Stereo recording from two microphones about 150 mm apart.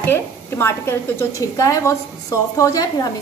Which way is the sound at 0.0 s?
15° left (ahead or behind).